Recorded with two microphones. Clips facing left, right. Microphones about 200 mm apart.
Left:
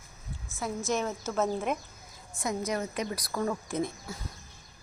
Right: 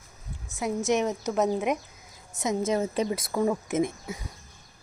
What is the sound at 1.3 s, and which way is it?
Speech, 15° right (ahead or behind).